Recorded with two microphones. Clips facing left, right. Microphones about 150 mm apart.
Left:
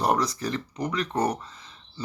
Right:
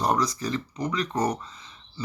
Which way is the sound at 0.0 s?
60° left (ahead or behind).